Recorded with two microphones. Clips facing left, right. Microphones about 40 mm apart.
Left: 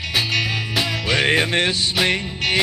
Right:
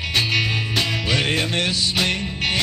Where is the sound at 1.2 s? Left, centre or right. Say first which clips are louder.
Left 7 dB; left.